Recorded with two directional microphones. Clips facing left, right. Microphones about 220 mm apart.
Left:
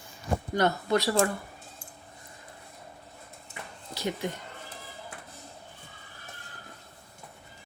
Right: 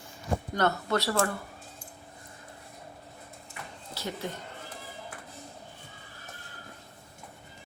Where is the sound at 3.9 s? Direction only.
15° left (ahead or behind).